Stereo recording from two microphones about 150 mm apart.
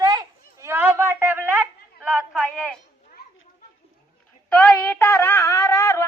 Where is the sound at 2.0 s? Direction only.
5° right (ahead or behind).